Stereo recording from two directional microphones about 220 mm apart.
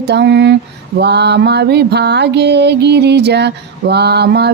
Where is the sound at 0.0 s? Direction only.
50° right (ahead or behind).